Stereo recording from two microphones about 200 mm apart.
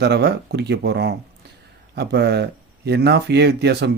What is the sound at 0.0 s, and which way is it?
Speech, 55° right (ahead or behind).